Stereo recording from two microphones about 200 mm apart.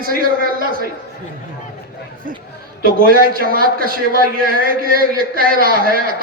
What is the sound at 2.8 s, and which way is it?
A man's voice, 45° right (ahead or behind).